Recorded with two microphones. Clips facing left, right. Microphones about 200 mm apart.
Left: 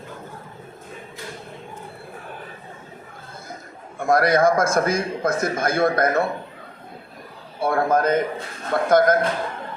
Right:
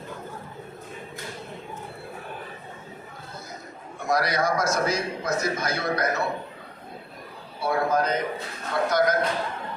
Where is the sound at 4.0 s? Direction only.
55° left (ahead or behind).